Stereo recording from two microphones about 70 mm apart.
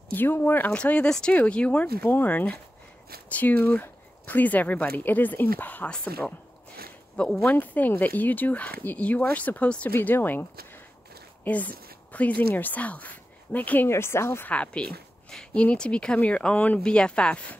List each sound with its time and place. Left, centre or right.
0.1 s speech: left
5.9 s speech: centre
9.9 s speech: left
11.4 s speech: left
13.8 s speech: left
14.5 s speech: centre